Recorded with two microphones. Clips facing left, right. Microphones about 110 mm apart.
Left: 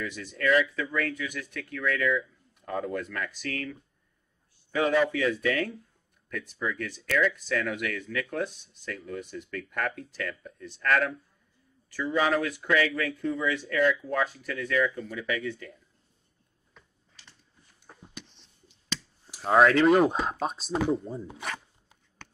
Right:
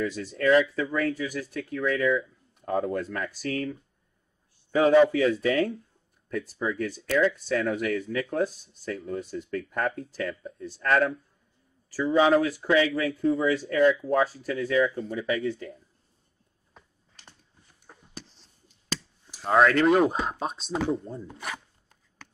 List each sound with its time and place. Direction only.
0.0 s speech: 35° right (ahead or behind)
16.7 s a sound: 45° right (ahead or behind)
19.2 s speech: centre (ahead or behind)